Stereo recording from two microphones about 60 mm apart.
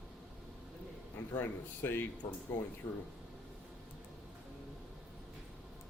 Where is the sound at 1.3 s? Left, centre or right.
Left.